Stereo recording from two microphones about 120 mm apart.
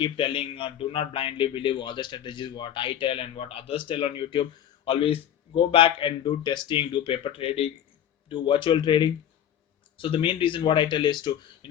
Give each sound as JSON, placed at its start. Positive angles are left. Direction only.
{"t": 0.0, "sound": "a man's voice", "side_deg": 45}